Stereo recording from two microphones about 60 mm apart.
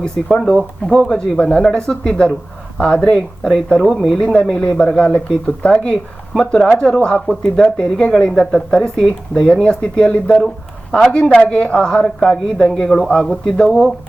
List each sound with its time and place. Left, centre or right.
0.3 s speech: centre
1.4 s a man's voice: centre
4.2 s speech: centre
12.9 s a man's voice: centre